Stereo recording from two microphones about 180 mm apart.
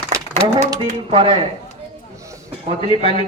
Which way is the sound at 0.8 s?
30° right (ahead or behind).